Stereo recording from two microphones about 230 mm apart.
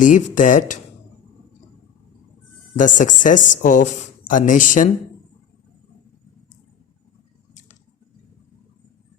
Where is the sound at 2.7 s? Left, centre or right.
Left.